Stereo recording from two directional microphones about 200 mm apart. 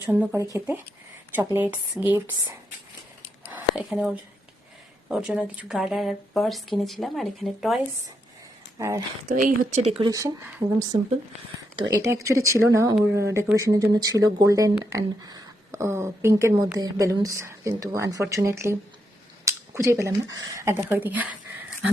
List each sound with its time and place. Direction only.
0.0 s speech: 10° right (ahead or behind)
9.3 s speech: 40° right (ahead or behind)
10.0 s speech: 15° right (ahead or behind)